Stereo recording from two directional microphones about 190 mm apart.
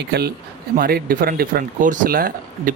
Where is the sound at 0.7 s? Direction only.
50° right (ahead or behind).